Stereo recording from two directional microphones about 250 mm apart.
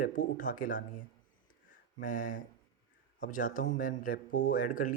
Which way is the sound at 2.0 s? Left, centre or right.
Left.